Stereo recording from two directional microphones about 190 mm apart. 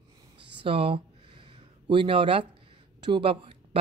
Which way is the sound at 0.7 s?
30° right (ahead or behind).